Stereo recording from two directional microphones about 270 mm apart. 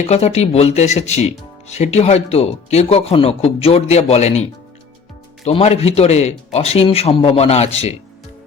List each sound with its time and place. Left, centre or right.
0.0 s speech: left
5.5 s speech: left